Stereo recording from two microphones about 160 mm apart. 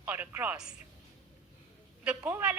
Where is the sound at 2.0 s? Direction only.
10° right (ahead or behind).